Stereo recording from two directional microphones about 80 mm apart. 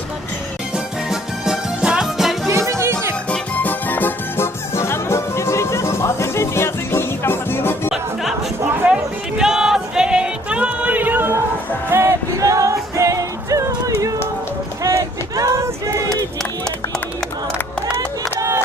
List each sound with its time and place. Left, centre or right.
1.1 s music: centre
2.6 s music: right
3.2 s music: centre
4.7 s music: left
8.8 s a sound: centre
9.4 s music: centre; by 12.1 s right
12.4 s music: right
14.8 s a sound: right
18.3 s music: right